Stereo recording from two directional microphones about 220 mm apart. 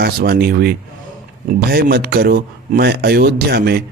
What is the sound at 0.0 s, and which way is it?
Speech, 45° right (ahead or behind).